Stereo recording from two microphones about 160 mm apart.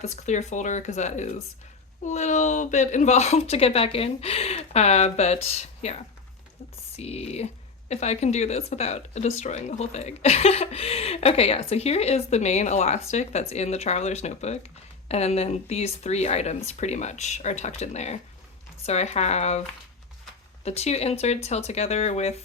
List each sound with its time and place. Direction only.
0.0 s speech: 45° left (ahead or behind)
20.7 s speech: 40° left (ahead or behind)